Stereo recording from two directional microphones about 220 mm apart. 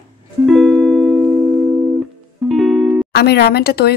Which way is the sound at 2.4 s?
Centre (ahead or behind).